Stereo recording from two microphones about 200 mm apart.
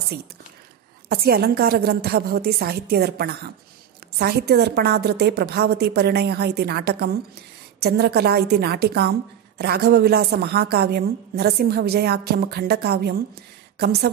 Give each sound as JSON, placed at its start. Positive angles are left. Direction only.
{"t": 1.0, "sound": "a woman's voice", "side_deg": -50}